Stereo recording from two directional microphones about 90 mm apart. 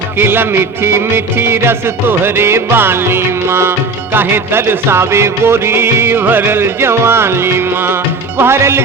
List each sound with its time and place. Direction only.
0.2 s music: 25° right (ahead or behind)